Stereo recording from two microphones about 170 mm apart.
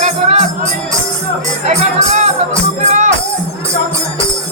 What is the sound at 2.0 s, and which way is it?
Music, 45° right (ahead or behind).